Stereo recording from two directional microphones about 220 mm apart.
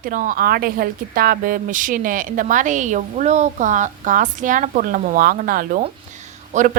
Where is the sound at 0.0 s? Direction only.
40° right (ahead or behind).